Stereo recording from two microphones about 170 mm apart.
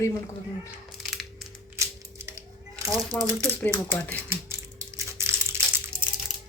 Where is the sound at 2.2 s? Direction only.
20° right (ahead or behind).